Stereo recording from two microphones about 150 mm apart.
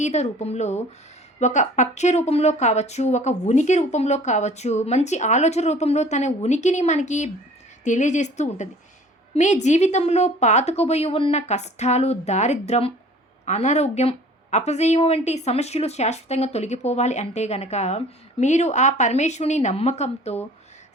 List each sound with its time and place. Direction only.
0.0 s speech: 50° left (ahead or behind)